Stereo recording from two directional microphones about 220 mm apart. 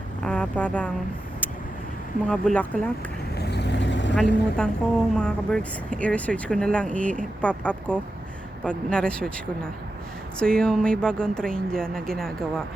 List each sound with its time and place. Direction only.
0.3 s speech: 5° left (ahead or behind)
2.2 s speech: 5° left (ahead or behind)
3.3 s vehicle: 50° left (ahead or behind)
4.1 s speech: 5° left (ahead or behind)
10.4 s speech: 5° left (ahead or behind)